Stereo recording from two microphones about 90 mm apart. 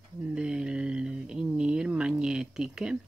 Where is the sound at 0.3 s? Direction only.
10° right (ahead or behind).